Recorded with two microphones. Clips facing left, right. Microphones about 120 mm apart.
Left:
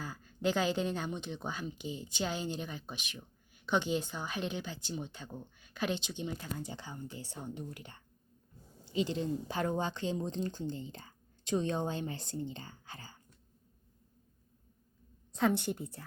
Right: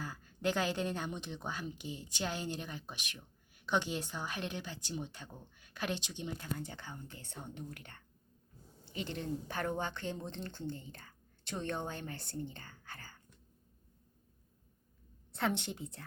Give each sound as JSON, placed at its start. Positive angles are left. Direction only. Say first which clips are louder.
{"t": 0.0, "sound": "a woman's voice", "louder": "left 2 dB", "side_deg": 5}
{"t": 7.2, "sound": "a woman's voice", "louder": "left 4 dB", "side_deg": 5}
{"t": 9.2, "sound": "speech", "louder": "left 3 dB", "side_deg": 15}
{"t": 15.4, "sound": "speech", "louder": "left 5 dB", "side_deg": 10}